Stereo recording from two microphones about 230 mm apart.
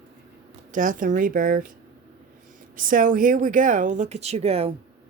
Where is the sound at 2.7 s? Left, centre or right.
Right.